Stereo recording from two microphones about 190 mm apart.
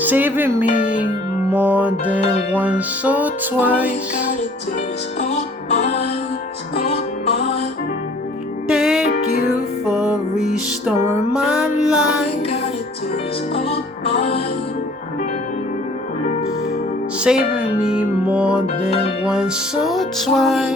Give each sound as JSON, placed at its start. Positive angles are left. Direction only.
{"t": 0.0, "sound": "music", "side_deg": -10}
{"t": 5.3, "sound": "music", "side_deg": 35}
{"t": 8.7, "sound": "music", "side_deg": 0}
{"t": 9.0, "sound": "music", "side_deg": 55}
{"t": 10.8, "sound": "music", "side_deg": -15}
{"t": 11.4, "sound": "music", "side_deg": -5}
{"t": 13.7, "sound": "music", "side_deg": 30}
{"t": 17.2, "sound": "music", "side_deg": -5}